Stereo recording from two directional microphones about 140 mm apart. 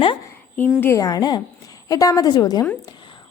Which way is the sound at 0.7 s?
15° left (ahead or behind).